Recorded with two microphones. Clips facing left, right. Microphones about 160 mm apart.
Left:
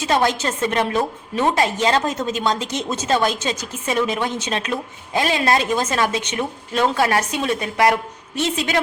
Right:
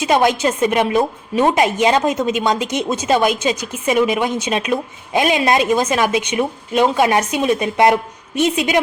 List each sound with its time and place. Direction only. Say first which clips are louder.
0.0 s a woman's voice: right 4 dB; 15° right (ahead or behind)